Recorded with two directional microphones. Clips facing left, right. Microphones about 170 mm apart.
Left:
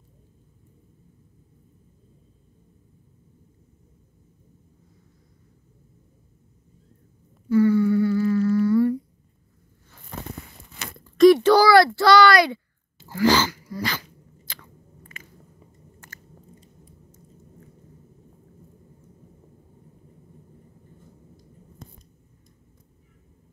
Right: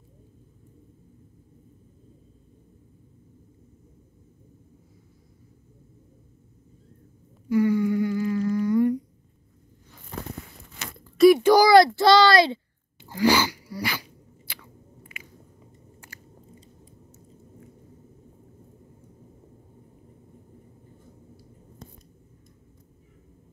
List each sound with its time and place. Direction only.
7.4 s humming: 15° right (ahead or behind)
11.1 s a child's voice: 10° right (ahead or behind)
13.1 s dog: 15° right (ahead or behind)
14.6 s biting: 10° right (ahead or behind)